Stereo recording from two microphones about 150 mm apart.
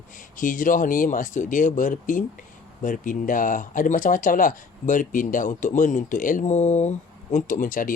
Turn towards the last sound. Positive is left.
turn(degrees=65)  # may be behind; listen again after turning